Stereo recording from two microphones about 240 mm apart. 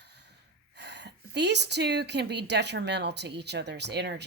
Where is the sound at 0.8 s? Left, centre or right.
Right.